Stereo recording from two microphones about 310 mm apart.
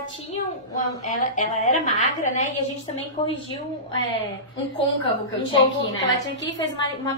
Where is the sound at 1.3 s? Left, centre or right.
Left.